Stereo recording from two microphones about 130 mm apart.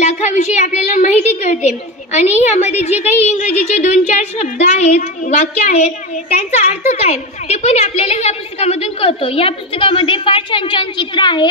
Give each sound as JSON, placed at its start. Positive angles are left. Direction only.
{"t": 0.0, "sound": "a woman's voice", "side_deg": 65}
{"t": 6.5, "sound": "a woman's voice", "side_deg": 55}